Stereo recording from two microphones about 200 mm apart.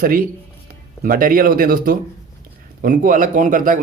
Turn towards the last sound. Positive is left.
turn(degrees=-40)  # may be behind; listen again after turning